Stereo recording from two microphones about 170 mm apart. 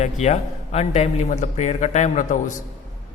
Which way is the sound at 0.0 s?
40° left (ahead or behind).